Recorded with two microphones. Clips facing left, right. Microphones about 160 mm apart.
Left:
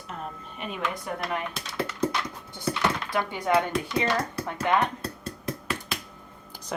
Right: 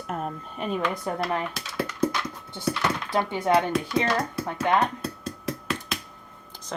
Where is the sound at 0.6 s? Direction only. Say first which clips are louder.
Right 5 dB; 40° right (ahead or behind).